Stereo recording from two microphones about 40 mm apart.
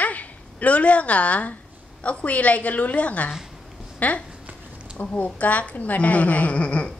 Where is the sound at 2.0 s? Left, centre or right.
Left.